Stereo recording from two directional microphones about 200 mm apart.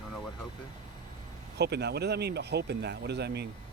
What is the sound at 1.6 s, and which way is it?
Speech, 55° right (ahead or behind).